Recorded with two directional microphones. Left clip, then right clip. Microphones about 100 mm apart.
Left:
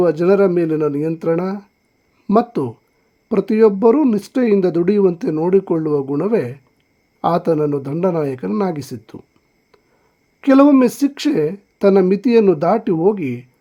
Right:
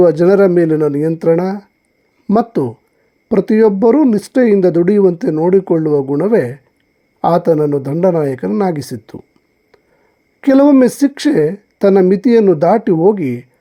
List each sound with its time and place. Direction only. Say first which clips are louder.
0.0 s speech: right 5 dB; 30° right (ahead or behind)
10.4 s speech: right 3 dB; 25° right (ahead or behind)